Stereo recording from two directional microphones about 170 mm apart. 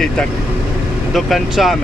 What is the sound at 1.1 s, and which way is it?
Speech, centre (ahead or behind).